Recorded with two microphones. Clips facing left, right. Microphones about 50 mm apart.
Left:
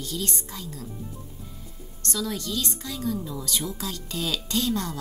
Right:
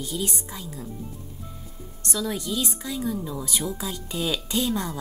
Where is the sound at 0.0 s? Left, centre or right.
Centre.